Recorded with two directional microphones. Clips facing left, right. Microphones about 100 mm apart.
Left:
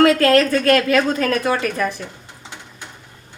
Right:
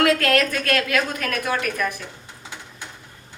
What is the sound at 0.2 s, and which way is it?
A woman's voice, 30° left (ahead or behind).